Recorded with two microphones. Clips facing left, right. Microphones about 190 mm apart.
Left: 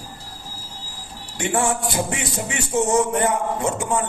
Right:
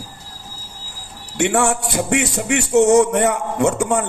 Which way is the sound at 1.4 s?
75° right (ahead or behind).